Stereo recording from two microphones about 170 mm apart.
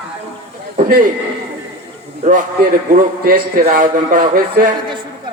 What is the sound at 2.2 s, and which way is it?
A man's voice, 50° right (ahead or behind).